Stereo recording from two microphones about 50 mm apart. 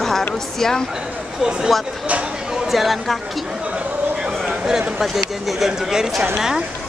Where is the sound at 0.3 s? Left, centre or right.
Centre.